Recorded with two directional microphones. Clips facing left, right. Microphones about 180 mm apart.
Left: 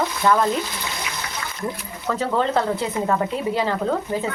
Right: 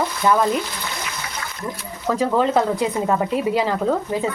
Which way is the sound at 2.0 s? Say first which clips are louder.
Right 3 dB; 10° right (ahead or behind).